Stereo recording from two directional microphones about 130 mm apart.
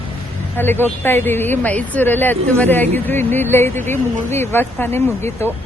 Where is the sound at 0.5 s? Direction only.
15° left (ahead or behind).